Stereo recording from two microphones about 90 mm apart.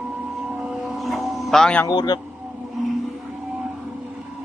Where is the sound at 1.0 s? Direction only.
Centre (ahead or behind).